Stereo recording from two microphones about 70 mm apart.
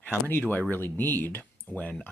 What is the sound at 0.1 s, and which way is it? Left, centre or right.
Speech, left.